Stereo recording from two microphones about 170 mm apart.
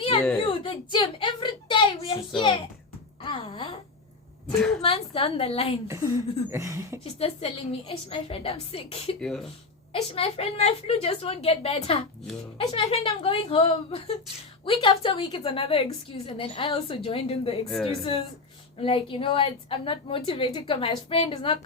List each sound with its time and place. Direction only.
0.0 s whimper: 30° left (ahead or behind)
0.4 s a sound: 30° left (ahead or behind)
3.2 s wail: 30° left (ahead or behind)
4.5 s a woman's voice: 5° left (ahead or behind)
4.8 s a woman's voice: 35° left (ahead or behind)
5.9 s a sound: 15° right (ahead or behind)
7.2 s a woman's voice: 35° left (ahead or behind)
9.2 s speech: centre (ahead or behind)
9.9 s a woman's voice: 35° left (ahead or behind)